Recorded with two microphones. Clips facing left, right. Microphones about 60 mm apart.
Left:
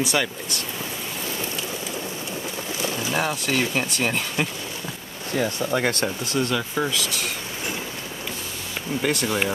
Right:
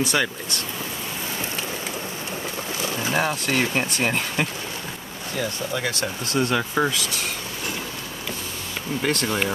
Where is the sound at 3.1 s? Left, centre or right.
Centre.